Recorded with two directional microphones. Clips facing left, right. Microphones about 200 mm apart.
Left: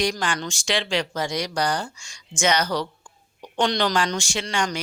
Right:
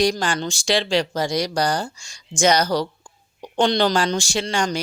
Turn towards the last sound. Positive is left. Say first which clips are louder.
# right 4 dB
turn(degrees=-30)  # may be behind; listen again after turning